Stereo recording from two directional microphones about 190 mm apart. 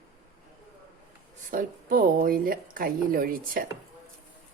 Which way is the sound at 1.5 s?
50° right (ahead or behind).